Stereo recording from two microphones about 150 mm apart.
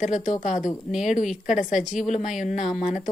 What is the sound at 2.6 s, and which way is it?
Speech, 5° right (ahead or behind).